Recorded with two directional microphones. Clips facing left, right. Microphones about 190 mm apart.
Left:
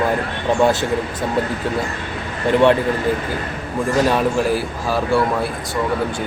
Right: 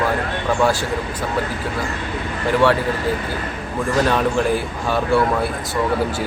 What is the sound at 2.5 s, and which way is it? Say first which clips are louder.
Speech: left 3 dB; 25° left (ahead or behind).